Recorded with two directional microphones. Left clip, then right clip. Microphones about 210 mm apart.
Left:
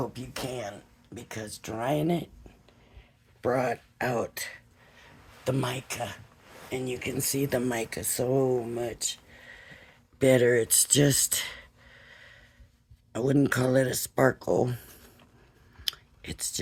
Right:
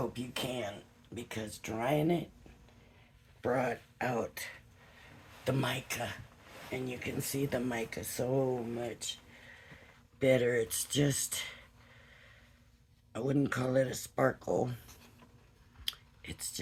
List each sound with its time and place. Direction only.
0.1 s speech: 40° left (ahead or behind)
3.4 s speech: 40° left (ahead or behind)
5.5 s speech: 25° left (ahead or behind); by 14.8 s 50° left (ahead or behind)
15.8 s whispering: 45° left (ahead or behind)